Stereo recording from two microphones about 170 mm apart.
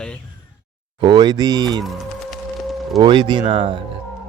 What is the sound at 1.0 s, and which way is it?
Speech, 25° right (ahead or behind).